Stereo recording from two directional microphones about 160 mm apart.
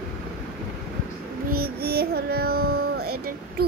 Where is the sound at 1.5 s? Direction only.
70° right (ahead or behind).